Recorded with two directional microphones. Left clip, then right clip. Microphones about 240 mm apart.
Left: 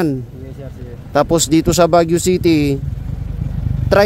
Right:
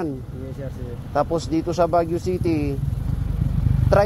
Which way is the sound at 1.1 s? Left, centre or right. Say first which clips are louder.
Left 8 dB; left.